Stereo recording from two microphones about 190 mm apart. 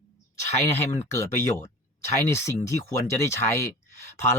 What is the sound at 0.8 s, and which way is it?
Speech, 15° left (ahead or behind).